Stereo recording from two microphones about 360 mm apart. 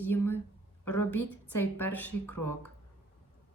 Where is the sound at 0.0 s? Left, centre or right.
Centre.